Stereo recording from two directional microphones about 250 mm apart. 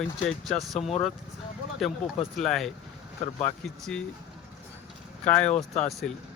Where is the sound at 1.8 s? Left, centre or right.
Centre.